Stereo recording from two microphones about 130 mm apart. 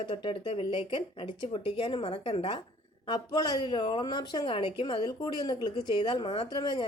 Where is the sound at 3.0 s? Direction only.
35° left (ahead or behind).